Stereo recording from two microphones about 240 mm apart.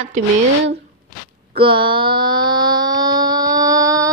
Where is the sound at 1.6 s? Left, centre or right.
Right.